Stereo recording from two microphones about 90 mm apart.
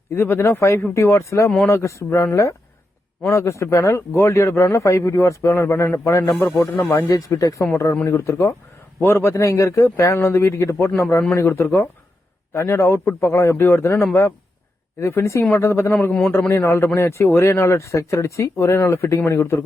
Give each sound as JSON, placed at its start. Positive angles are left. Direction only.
{"t": 0.1, "sound": "speech", "side_deg": 25}
{"t": 6.9, "sound": "speech", "side_deg": 40}